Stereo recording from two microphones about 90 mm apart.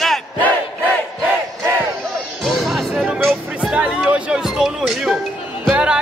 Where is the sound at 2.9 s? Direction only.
15° right (ahead or behind).